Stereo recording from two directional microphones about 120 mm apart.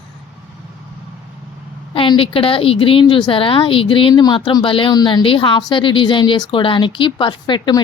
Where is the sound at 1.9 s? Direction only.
45° left (ahead or behind).